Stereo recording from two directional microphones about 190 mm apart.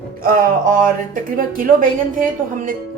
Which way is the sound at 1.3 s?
45° right (ahead or behind).